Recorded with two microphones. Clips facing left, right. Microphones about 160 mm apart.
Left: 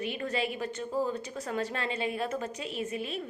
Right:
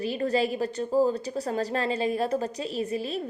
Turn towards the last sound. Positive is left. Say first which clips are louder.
# right 5 dB
turn(degrees=-35)  # may be behind; listen again after turning